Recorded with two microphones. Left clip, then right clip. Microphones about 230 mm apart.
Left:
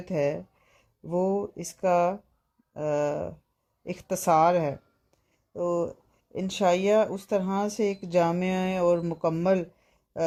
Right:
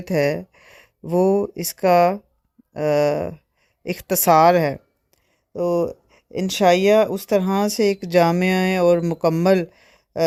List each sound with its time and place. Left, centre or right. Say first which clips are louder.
0.0 s speech: right 7 dB; right